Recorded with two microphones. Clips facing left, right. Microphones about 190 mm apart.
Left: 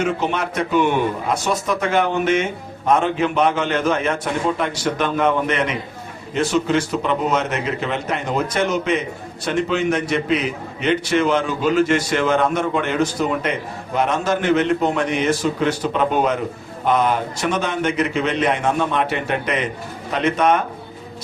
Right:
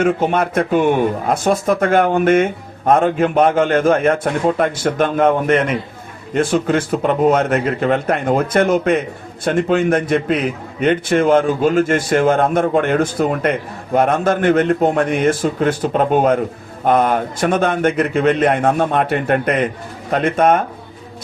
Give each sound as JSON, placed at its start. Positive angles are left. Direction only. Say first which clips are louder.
{"t": 0.0, "sound": "speech", "louder": "right 5 dB", "side_deg": -50}